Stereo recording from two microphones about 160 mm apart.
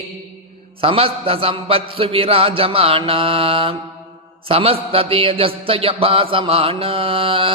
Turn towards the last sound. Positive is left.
turn(degrees=-35)  # may be behind; listen again after turning